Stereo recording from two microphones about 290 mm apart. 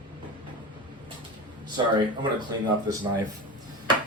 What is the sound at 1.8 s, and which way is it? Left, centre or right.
Speech, centre.